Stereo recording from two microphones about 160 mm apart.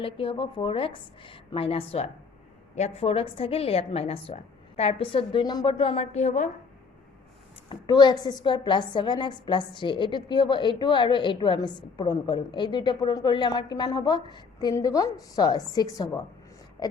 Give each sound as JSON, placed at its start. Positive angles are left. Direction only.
{"t": 0.0, "sound": "a woman's voice", "side_deg": 35}
{"t": 7.7, "sound": "a woman's voice", "side_deg": 25}